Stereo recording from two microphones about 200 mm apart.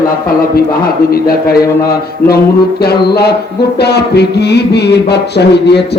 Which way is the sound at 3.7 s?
55° left (ahead or behind).